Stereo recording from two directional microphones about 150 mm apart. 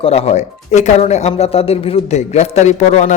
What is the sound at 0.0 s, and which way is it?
A man's voice, 45° left (ahead or behind).